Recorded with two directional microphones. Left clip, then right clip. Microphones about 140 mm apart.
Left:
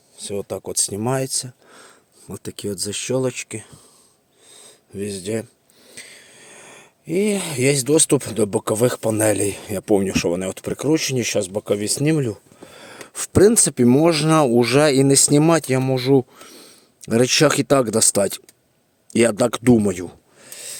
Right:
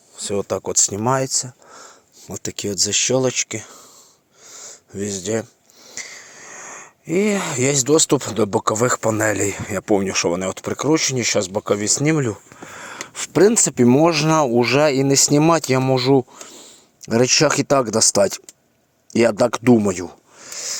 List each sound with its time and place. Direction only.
0.2 s speech: centre (ahead or behind); by 2.3 s 15° left (ahead or behind)
2.3 s speech: 10° right (ahead or behind); by 11.3 s 30° left (ahead or behind)
11.3 s speech: 15° left (ahead or behind)
12.6 s wheeze: 25° left (ahead or behind)
13.1 s speech: 50° left (ahead or behind)
13.5 s speech: 30° left (ahead or behind)
20.4 s a sound: 5° left (ahead or behind)